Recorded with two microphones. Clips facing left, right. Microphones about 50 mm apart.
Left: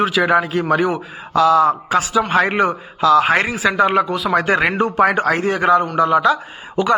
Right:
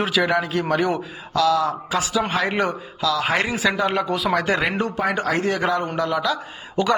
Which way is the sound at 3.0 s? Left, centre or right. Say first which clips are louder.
Left 8 dB; left.